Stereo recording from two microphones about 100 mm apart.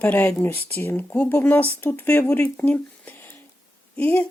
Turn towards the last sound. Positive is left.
turn(degrees=20)  # may be behind; listen again after turning